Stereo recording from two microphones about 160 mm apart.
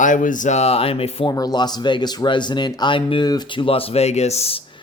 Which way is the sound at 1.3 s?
25° left (ahead or behind).